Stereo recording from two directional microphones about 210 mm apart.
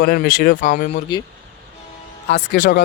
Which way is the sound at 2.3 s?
50° left (ahead or behind).